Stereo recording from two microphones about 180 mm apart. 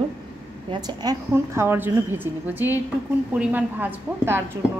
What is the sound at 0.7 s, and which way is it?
A woman's voice, 20° right (ahead or behind).